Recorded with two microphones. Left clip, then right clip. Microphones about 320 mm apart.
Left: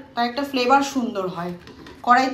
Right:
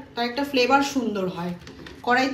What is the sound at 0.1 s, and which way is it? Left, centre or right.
A woman's voice, centre.